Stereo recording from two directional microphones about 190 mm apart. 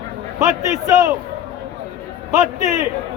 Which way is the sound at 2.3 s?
20° right (ahead or behind).